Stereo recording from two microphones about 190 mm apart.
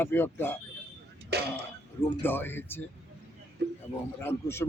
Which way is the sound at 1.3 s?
60° right (ahead or behind).